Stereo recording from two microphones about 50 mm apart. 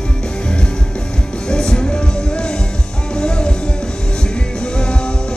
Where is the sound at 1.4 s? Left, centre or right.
Centre.